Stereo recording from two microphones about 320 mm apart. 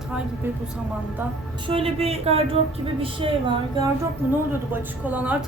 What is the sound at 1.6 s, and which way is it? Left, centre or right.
Speech, centre.